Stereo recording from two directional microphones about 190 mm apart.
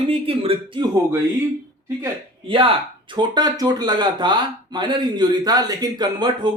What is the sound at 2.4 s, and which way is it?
Speech, 25° right (ahead or behind).